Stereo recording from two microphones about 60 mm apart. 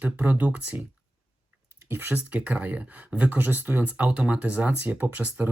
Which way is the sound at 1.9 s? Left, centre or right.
Right.